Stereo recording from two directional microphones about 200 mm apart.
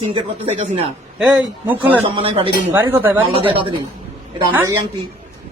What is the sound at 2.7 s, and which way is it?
Speech, 10° right (ahead or behind).